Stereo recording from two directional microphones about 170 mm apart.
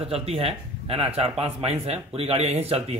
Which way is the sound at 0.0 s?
35° right (ahead or behind).